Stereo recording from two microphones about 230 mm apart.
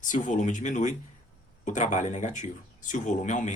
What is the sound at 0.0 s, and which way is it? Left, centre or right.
Speech, left.